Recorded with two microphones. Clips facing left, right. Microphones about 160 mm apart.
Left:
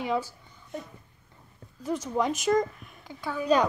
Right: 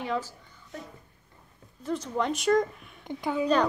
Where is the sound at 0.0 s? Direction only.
10° left (ahead or behind).